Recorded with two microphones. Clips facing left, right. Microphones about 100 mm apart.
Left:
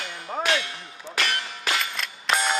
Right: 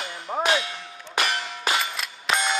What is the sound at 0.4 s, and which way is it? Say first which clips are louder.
Clang: right 2 dB; 20° right (ahead or behind).